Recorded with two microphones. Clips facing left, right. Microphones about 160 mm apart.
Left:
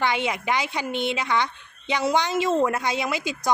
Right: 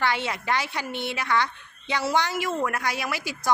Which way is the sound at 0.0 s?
15° left (ahead or behind).